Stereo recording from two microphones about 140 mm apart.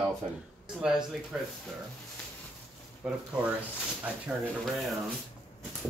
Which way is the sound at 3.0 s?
10° right (ahead or behind).